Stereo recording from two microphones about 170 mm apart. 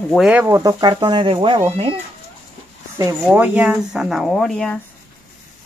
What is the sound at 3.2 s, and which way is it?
Speech, 10° right (ahead or behind).